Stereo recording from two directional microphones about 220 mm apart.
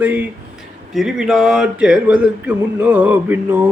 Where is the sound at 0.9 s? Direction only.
Centre (ahead or behind).